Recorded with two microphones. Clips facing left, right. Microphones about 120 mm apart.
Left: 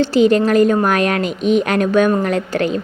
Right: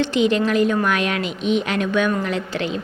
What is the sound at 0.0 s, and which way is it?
A woman's voice, 40° left (ahead or behind).